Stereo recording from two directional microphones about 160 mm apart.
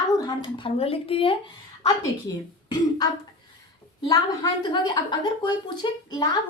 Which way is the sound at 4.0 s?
25° left (ahead or behind).